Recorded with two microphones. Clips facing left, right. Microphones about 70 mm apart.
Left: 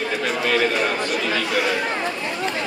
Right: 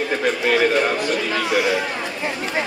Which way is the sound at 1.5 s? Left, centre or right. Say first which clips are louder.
Right 4 dB; centre.